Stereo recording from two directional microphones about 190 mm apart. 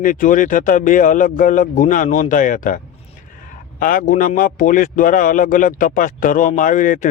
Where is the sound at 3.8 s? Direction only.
45° left (ahead or behind).